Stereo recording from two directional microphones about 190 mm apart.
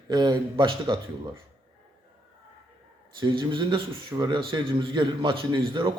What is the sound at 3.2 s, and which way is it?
Speech, 25° right (ahead or behind).